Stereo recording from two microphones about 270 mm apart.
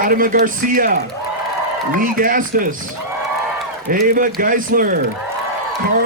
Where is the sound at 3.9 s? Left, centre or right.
Right.